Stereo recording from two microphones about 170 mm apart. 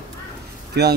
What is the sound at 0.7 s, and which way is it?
Speech, 75° right (ahead or behind).